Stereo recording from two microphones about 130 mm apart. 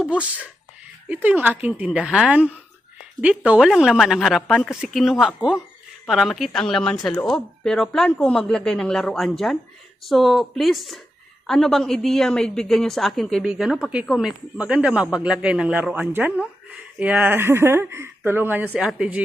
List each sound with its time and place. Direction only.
1.0 s a woman's voice: 10° right (ahead or behind)